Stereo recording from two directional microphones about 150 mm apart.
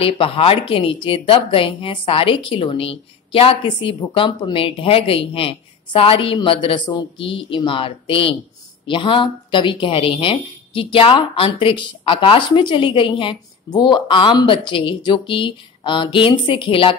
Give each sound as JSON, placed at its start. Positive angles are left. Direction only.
{"t": 0.0, "sound": "a woman's voice", "side_deg": 35}